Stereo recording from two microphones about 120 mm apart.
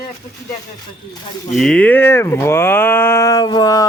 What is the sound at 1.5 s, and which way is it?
Speech, 5° left (ahead or behind).